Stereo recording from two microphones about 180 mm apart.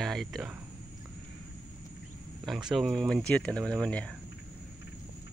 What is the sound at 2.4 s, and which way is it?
Speech, centre (ahead or behind).